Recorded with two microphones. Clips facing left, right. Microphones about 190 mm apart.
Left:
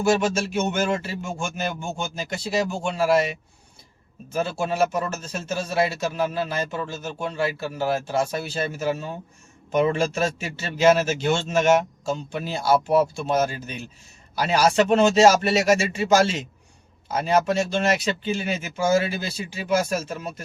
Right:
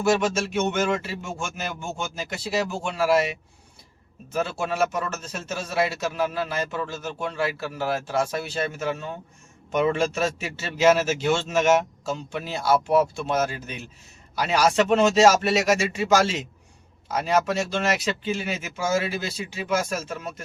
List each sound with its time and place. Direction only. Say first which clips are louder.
0.0 s a man's voice: left 1 dB; centre (ahead or behind)
4.7 s speech: left 2 dB; 30° left (ahead or behind)
5.3 s a man's voice: left 3 dB; centre (ahead or behind)